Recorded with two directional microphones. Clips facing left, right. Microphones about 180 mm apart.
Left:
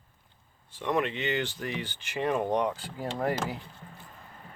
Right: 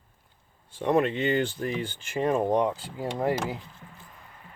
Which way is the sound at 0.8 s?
35° right (ahead or behind).